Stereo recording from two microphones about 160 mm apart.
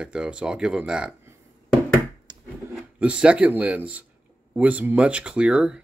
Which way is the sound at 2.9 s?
5° right (ahead or behind).